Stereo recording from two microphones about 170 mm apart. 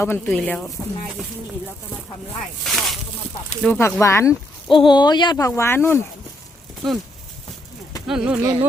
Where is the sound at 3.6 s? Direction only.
15° left (ahead or behind).